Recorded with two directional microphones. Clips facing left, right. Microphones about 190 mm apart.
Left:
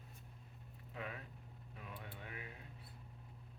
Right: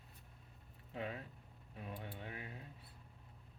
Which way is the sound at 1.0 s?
30° right (ahead or behind).